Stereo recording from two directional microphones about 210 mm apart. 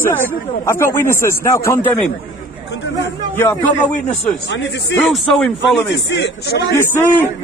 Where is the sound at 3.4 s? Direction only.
10° left (ahead or behind).